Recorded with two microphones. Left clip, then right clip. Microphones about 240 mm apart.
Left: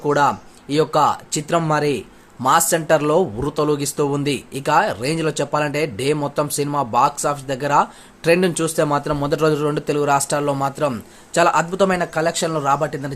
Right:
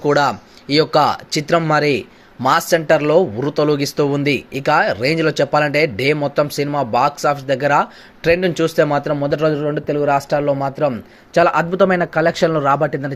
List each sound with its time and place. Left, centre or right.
0.0 s speech: centre